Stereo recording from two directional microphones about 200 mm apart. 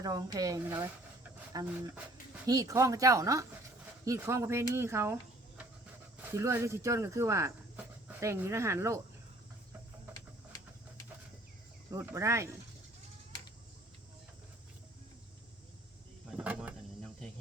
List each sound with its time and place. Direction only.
0.0 s speech: 20° right (ahead or behind)
6.2 s speech: 15° right (ahead or behind)
11.9 s speech: 10° right (ahead or behind)
16.3 s a sound: 5° right (ahead or behind)